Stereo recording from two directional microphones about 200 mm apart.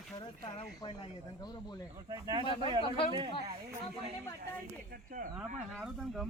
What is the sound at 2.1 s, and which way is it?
Speech, 20° right (ahead or behind).